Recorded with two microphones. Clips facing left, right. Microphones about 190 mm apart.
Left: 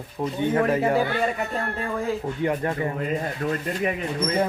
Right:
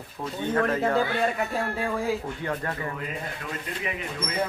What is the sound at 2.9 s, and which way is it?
Speech, 40° left (ahead or behind).